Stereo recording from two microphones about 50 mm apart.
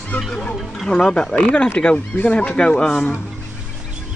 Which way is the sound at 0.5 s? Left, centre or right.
Centre.